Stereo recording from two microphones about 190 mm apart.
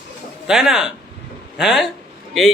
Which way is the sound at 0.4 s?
5° right (ahead or behind).